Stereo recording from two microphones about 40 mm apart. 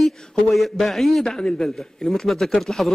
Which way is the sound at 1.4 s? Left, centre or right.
Centre.